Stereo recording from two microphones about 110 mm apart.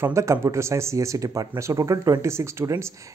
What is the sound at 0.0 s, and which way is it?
Speech, 25° right (ahead or behind).